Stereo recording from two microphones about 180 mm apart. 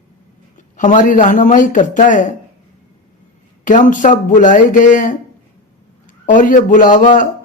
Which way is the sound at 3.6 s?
45° left (ahead or behind).